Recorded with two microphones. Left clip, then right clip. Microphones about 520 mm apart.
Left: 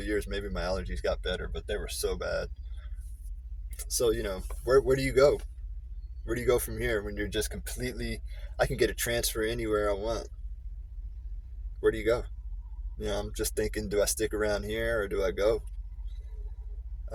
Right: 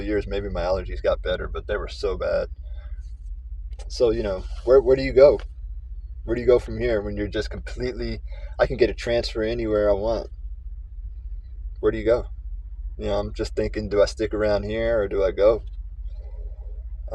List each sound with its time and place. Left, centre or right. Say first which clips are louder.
0.0 s speech: right 7 dB; left
4.0 s speech: right 8 dB; left
11.9 s speech: right 7 dB; left